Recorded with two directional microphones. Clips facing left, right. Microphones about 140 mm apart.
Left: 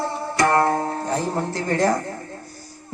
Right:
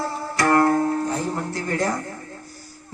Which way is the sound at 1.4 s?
35° left (ahead or behind).